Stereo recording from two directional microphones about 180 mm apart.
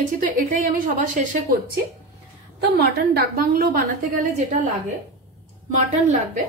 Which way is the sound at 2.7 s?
60° right (ahead or behind).